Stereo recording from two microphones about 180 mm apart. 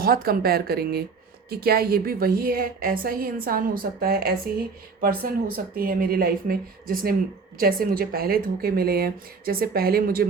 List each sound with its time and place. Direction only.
0.0 s a woman's voice: 55° right (ahead or behind)